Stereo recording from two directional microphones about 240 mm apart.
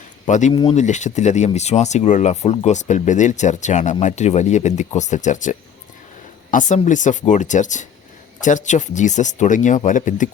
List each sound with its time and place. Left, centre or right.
0.3 s speech: left